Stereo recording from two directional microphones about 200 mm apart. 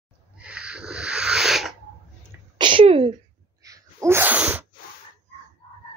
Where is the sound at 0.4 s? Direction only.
5° right (ahead or behind).